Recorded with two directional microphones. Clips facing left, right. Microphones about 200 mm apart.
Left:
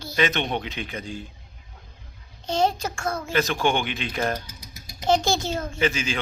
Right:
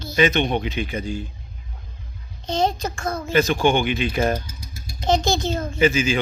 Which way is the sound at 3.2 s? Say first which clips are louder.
Right 6 dB; 5° right (ahead or behind).